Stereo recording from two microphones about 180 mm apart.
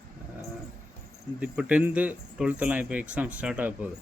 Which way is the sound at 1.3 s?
5° right (ahead or behind).